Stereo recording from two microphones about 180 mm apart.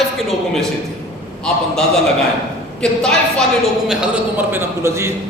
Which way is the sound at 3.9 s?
5° right (ahead or behind).